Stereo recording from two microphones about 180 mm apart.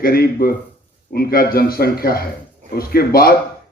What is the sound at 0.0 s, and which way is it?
A man's voice, 60° left (ahead or behind).